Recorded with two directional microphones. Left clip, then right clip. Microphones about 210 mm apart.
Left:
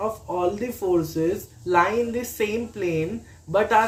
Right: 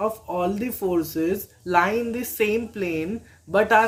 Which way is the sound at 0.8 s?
50° right (ahead or behind).